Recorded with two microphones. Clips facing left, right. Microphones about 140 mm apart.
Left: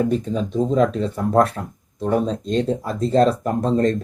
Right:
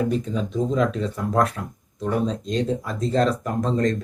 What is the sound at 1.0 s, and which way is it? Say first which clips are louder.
Speech: left 4 dB; 30° left (ahead or behind).